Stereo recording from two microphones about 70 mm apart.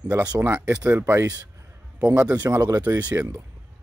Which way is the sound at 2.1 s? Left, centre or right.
Right.